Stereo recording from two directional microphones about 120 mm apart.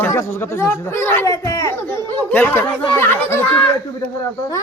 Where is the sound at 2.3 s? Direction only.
15° left (ahead or behind).